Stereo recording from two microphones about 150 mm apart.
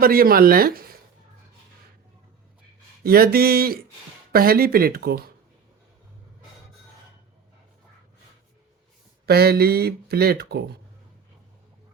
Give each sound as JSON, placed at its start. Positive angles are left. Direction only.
{"t": 0.0, "sound": "speech", "side_deg": -75}
{"t": 3.0, "sound": "speech", "side_deg": -85}
{"t": 9.2, "sound": "speech", "side_deg": -90}